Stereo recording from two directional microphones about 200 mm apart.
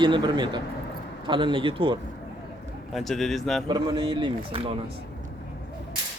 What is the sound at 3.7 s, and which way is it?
A man's voice, 20° right (ahead or behind).